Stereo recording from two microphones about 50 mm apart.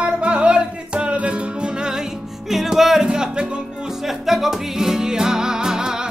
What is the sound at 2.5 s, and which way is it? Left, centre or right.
Music, centre.